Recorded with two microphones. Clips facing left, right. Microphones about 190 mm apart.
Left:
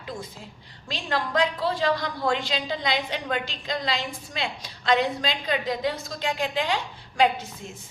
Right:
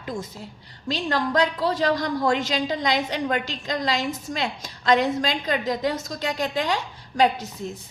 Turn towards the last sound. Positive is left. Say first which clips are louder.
# right 2 dB
turn(degrees=-40)  # may be behind; listen again after turning